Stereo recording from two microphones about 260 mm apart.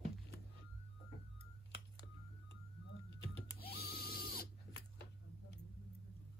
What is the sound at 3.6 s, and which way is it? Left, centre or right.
Printer, left.